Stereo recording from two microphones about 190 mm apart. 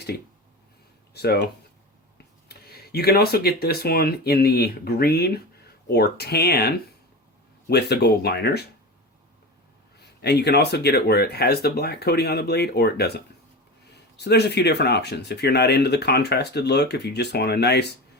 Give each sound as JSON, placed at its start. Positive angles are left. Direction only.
{"t": 1.1, "sound": "speech", "side_deg": 55}
{"t": 2.5, "sound": "speech", "side_deg": 55}
{"t": 10.2, "sound": "speech", "side_deg": 60}